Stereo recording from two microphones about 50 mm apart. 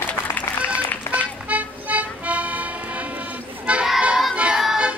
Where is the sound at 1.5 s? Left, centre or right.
Right.